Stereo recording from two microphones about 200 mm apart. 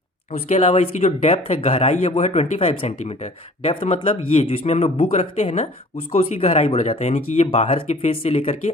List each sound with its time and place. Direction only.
0.4 s speech: 30° left (ahead or behind)